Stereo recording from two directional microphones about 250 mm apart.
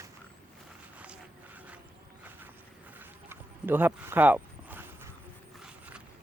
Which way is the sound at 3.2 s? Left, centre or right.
Centre.